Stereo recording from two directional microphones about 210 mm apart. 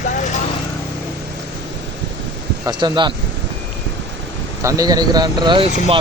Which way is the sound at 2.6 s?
20° right (ahead or behind).